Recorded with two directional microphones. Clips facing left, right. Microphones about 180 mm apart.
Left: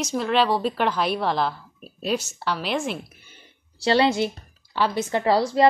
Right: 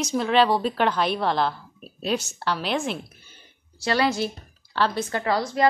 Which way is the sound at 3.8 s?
30° left (ahead or behind).